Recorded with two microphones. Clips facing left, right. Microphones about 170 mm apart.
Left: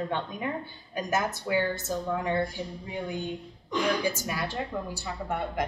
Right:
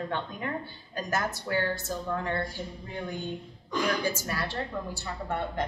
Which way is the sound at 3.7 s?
15° left (ahead or behind).